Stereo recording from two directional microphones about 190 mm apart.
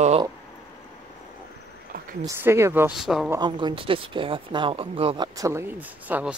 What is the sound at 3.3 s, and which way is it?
Speech, 25° right (ahead or behind).